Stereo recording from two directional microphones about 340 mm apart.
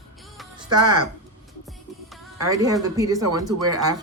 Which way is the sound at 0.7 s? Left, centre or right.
Centre.